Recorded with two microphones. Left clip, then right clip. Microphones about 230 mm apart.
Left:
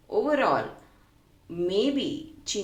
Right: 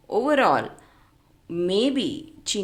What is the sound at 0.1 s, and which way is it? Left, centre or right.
A woman's voice, right.